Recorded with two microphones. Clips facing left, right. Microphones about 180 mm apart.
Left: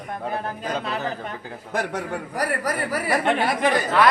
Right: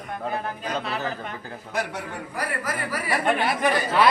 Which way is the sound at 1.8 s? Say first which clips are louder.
Left 3 dB; 45° left (ahead or behind).